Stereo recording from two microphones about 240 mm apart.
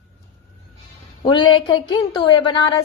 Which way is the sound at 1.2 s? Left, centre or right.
Centre.